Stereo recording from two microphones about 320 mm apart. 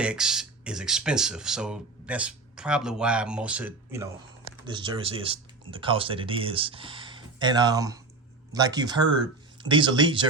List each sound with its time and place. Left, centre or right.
0.0 s speech: centre